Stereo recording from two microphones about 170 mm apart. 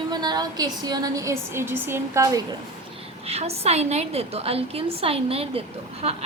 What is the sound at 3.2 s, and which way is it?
A woman's voice, 35° right (ahead or behind).